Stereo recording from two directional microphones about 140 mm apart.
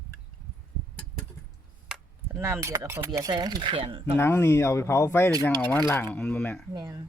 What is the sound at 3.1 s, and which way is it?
Speech, 30° right (ahead or behind).